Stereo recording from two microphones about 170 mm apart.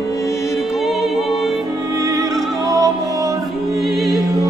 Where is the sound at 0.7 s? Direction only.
Centre (ahead or behind).